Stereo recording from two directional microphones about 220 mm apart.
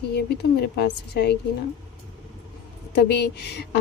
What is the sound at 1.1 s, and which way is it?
Speech, 50° left (ahead or behind).